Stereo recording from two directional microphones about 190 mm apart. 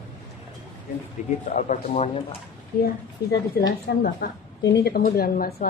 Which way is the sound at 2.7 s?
55° left (ahead or behind).